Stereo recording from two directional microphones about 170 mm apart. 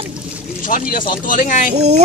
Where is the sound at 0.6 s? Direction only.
55° left (ahead or behind).